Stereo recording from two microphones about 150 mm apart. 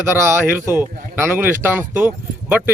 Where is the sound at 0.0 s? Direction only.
15° right (ahead or behind).